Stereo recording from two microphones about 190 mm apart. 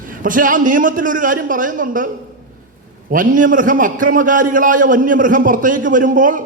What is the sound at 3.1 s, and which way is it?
A man's voice, 45° right (ahead or behind).